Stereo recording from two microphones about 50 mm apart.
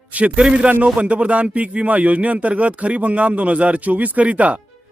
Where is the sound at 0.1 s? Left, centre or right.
Right.